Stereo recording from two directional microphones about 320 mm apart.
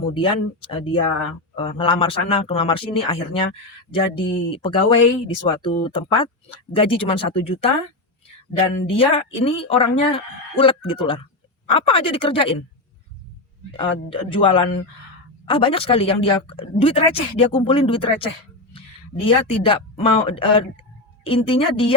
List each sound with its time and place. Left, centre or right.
0.1 s a woman's voice: centre
9.0 s a woman's voice: centre
13.7 s a woman's voice: centre